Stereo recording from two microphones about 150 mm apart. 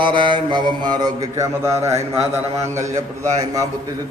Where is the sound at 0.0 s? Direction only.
35° right (ahead or behind).